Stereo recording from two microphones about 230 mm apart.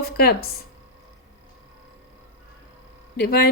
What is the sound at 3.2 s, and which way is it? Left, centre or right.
Speech, left.